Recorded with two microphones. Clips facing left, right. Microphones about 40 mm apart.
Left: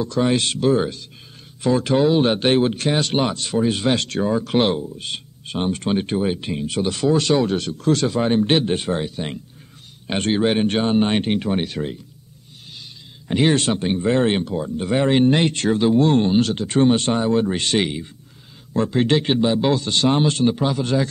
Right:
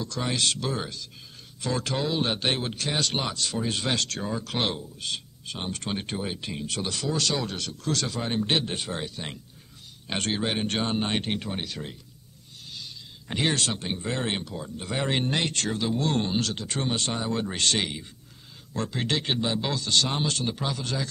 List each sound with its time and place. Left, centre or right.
0.0 s speech: left
13.3 s speech: centre
13.6 s speech: left